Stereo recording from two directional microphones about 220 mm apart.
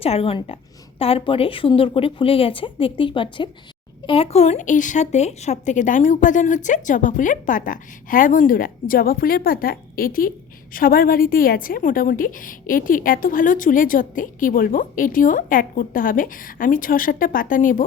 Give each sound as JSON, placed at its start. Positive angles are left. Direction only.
{"t": 0.0, "sound": "a woman's voice", "side_deg": 25}